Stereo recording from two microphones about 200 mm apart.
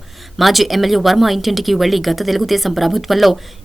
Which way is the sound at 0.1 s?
Centre (ahead or behind).